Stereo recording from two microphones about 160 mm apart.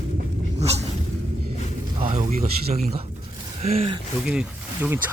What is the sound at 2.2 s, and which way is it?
Speech, 55° right (ahead or behind).